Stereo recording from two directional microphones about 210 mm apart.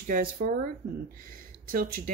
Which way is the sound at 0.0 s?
45° right (ahead or behind).